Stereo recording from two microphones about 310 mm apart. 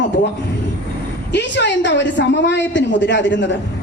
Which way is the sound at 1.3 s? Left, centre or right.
Left.